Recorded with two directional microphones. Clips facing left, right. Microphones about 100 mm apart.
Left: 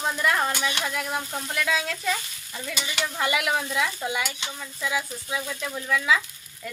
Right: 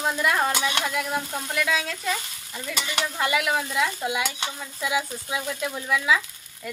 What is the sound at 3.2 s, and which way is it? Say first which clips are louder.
Speech: right 1 dB; centre (ahead or behind).